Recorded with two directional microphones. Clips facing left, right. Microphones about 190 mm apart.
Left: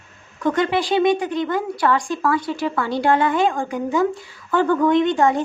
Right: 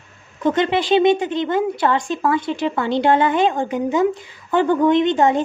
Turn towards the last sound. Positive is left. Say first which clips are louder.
# right 1 dB
turn(degrees=-20)  # may be behind; listen again after turning